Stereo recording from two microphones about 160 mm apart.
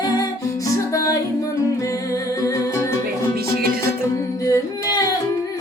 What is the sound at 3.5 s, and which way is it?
Music, 75° right (ahead or behind).